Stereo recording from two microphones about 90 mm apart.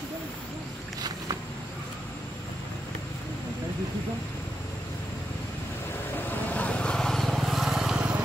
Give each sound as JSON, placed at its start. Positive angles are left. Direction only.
{"t": 6.1, "sound": "vehicle", "side_deg": 20}